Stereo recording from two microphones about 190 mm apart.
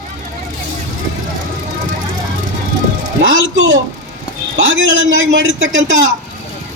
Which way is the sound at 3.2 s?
85° right.